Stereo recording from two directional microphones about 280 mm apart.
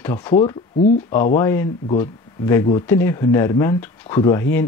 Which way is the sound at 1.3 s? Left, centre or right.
Centre.